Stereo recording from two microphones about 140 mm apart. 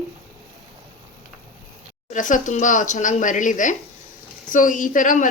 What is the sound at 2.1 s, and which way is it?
A woman's voice, 65° left (ahead or behind).